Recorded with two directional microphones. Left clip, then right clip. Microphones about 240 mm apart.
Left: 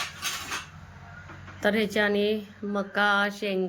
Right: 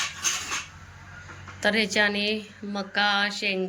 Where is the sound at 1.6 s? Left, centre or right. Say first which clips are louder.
Right 2 dB; centre.